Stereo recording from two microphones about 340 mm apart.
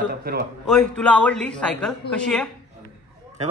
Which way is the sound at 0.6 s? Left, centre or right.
Centre.